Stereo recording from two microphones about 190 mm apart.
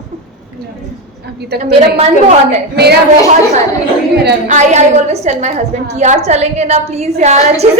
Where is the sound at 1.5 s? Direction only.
60° right (ahead or behind).